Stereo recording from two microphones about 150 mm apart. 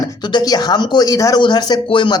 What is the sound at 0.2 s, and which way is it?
Speech, 30° left (ahead or behind).